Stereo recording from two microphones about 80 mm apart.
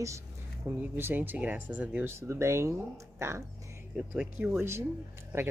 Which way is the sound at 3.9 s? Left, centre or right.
Centre.